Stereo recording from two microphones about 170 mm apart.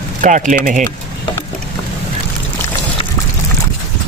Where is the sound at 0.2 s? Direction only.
50° right (ahead or behind).